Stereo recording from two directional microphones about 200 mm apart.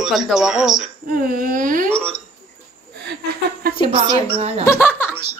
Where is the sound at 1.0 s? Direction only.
50° right (ahead or behind).